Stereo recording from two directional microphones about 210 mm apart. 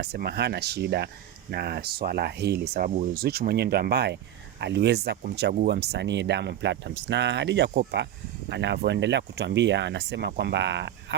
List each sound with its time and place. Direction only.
0.0 s speech: 50° right (ahead or behind)